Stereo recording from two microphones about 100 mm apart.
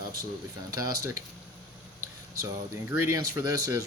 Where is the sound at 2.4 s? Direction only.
25° right (ahead or behind).